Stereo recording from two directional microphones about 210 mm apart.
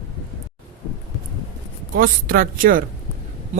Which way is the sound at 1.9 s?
40° right (ahead or behind).